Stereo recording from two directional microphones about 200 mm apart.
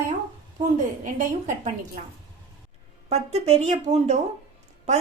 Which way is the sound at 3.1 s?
30° right (ahead or behind).